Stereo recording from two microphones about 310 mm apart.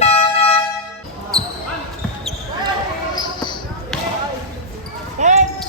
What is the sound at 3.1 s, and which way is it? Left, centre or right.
Basketball bounce, centre.